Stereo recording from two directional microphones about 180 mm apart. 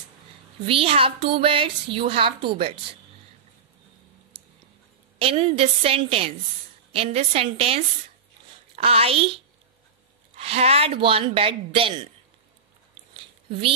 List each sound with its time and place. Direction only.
0.7 s speech: 30° right (ahead or behind)
5.2 s speech: 30° right (ahead or behind)
13.1 s a sound: 30° right (ahead or behind)